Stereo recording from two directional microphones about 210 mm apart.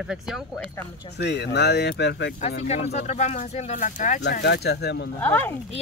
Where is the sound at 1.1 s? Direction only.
55° left (ahead or behind).